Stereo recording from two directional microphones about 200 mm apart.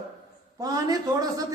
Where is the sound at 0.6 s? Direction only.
20° right (ahead or behind).